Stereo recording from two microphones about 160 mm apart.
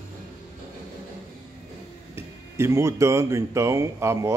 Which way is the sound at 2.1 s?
15° right (ahead or behind).